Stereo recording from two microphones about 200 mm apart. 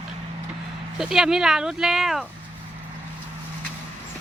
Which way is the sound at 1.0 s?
5° right (ahead or behind).